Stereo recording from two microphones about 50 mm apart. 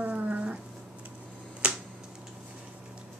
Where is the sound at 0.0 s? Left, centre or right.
Right.